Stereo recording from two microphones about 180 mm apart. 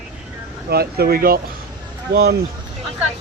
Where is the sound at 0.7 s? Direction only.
60° right (ahead or behind).